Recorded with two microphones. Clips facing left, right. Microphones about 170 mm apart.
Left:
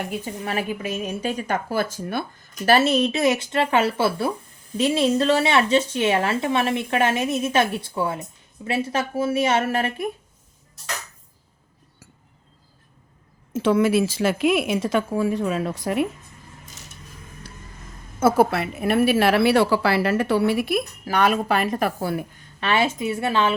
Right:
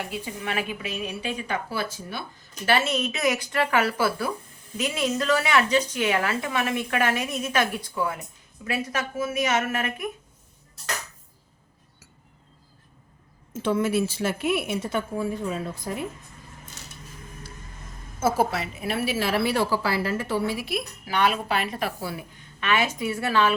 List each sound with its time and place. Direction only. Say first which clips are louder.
0.1 s a woman's voice: left 3 dB; 40° left (ahead or behind)
2.6 s a woman's voice: left 6 dB; 35° left (ahead or behind)
13.5 s speech: left 5 dB; 85° left
18.2 s a woman's voice: left 5 dB; 60° left (ahead or behind)
22.6 s a woman's voice: left 3 dB; 30° left (ahead or behind)